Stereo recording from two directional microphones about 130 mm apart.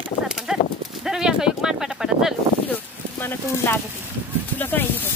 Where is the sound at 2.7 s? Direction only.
15° left (ahead or behind).